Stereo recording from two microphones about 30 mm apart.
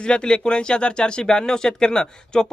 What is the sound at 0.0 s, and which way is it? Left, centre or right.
Speech, left.